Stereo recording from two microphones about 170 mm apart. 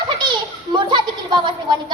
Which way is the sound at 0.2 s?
25° right (ahead or behind).